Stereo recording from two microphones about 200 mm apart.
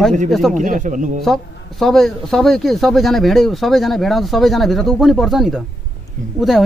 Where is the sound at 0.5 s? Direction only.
40° right (ahead or behind).